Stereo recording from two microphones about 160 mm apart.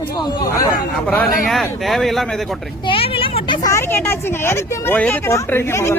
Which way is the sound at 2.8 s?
35° left (ahead or behind).